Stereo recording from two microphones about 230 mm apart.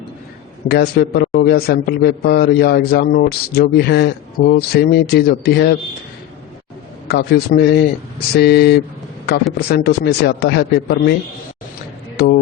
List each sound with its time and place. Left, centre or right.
0.7 s a man's voice: left
7.1 s a man's voice: left
12.2 s a man's voice: left